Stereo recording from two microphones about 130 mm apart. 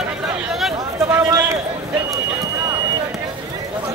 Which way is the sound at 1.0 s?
25° right (ahead or behind).